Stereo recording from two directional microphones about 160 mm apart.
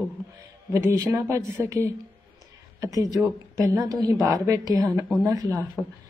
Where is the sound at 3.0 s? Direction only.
20° right (ahead or behind).